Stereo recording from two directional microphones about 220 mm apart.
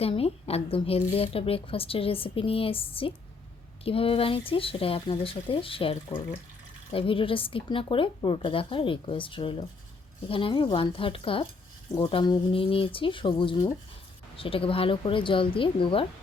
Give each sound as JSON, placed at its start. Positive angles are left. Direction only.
{"t": 0.0, "sound": "speech", "side_deg": 25}